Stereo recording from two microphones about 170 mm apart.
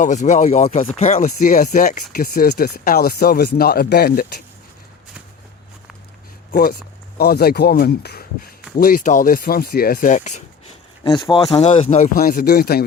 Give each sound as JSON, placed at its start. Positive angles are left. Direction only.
{"t": 0.0, "sound": "speech", "side_deg": 45}
{"t": 2.1, "sound": "speech", "side_deg": 65}
{"t": 6.5, "sound": "speech", "side_deg": 55}
{"t": 8.8, "sound": "speech", "side_deg": 55}
{"t": 11.0, "sound": "speech", "side_deg": 25}